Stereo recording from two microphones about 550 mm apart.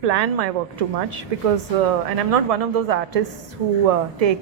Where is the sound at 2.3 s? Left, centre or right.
Right.